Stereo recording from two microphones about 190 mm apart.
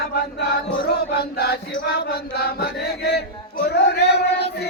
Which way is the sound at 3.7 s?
60° left (ahead or behind).